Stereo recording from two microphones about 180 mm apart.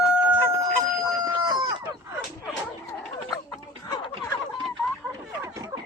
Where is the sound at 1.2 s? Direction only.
25° right (ahead or behind).